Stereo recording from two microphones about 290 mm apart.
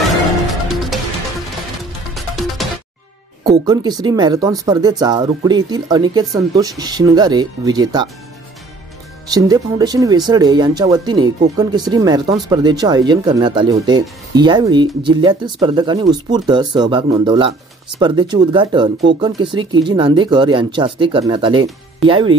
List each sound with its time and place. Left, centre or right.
2.1 s music: centre
3.6 s speech: centre
9.3 s speech: centre